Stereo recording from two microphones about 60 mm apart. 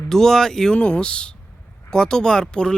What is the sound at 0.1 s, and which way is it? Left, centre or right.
Speech, centre.